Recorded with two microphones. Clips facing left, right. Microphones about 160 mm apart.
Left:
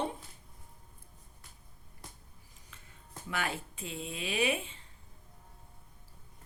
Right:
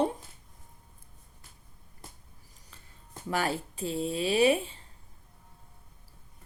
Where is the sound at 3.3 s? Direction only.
35° right (ahead or behind).